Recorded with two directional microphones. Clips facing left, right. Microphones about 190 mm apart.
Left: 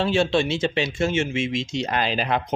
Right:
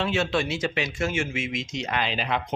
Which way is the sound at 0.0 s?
30° left (ahead or behind).